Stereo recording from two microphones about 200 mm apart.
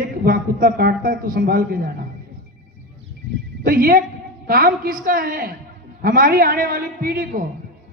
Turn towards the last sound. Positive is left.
turn(degrees=-50)  # may be behind; listen again after turning